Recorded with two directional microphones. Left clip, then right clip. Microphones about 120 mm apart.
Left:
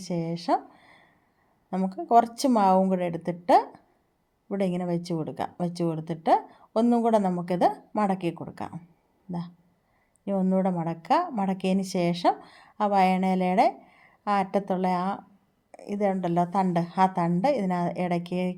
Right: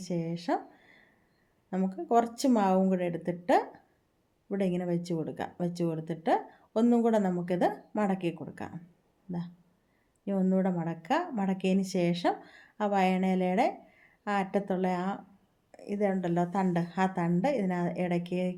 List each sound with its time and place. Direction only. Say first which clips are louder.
0.0 s a woman's voice: left 4 dB; 50° left (ahead or behind)
10.2 s a woman's voice: left 4 dB; 45° left (ahead or behind)